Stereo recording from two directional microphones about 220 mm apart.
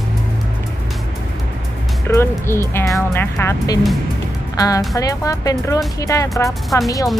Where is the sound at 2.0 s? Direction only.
10° left (ahead or behind).